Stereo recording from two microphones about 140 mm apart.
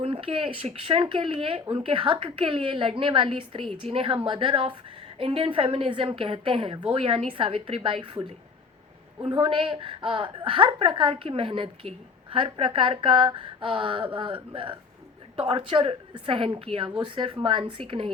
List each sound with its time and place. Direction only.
0.0 s a woman's voice: 40° right (ahead or behind)